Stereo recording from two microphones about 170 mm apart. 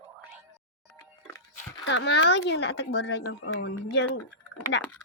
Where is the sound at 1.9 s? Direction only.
85° left.